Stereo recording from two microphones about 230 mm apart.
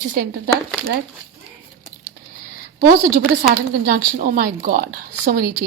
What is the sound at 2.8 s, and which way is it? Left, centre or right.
A woman's voice, right.